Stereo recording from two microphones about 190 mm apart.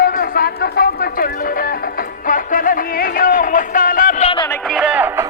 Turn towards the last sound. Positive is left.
turn(degrees=-10)  # may be behind; listen again after turning